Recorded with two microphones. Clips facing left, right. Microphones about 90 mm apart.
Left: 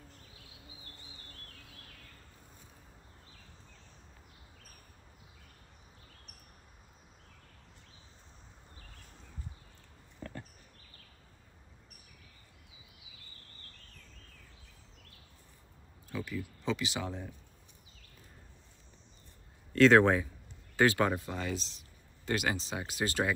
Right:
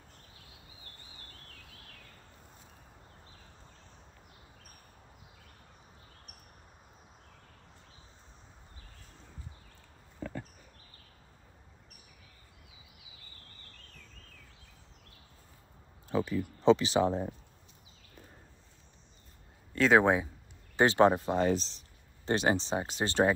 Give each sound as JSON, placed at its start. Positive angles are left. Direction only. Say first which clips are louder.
{"t": 16.1, "sound": "speech", "louder": "right 8 dB", "side_deg": -30}
{"t": 19.7, "sound": "speech", "louder": "left 2 dB", "side_deg": -5}
{"t": 20.7, "sound": "speech", "louder": "right 4 dB", "side_deg": -25}